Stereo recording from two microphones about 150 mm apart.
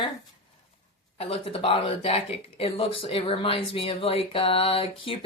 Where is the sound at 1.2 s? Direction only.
40° left (ahead or behind).